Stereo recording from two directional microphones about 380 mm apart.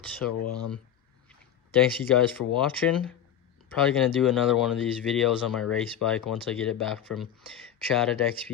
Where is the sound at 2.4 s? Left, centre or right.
Left.